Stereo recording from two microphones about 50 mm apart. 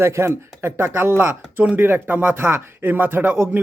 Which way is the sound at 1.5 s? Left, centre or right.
Right.